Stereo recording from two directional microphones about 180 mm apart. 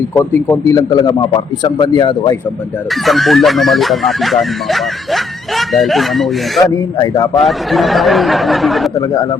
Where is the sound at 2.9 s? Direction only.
Centre (ahead or behind).